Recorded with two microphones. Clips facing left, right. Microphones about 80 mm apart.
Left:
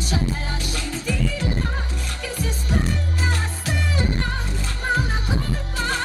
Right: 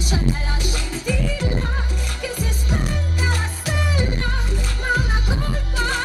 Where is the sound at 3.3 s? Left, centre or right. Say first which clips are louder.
Right 1 dB; centre.